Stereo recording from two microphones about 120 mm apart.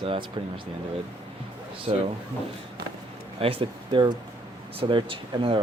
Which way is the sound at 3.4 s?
50° right (ahead or behind).